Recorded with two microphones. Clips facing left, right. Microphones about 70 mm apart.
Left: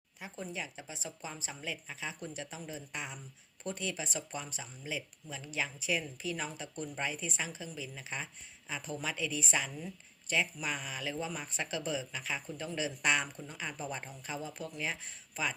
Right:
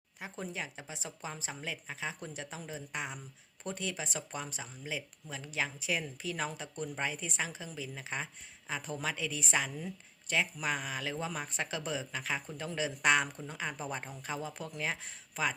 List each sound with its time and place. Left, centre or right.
0.2 s a woman's voice: right